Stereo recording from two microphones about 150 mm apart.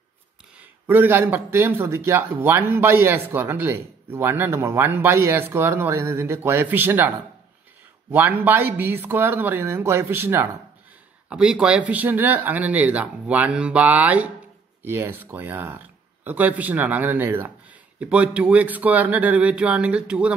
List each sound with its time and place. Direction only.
0.6 s a man's voice: 10° right (ahead or behind)